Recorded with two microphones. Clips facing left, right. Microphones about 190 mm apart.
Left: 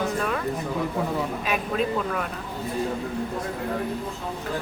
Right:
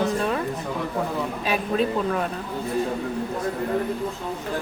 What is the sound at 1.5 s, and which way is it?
Speech, 30° right (ahead or behind).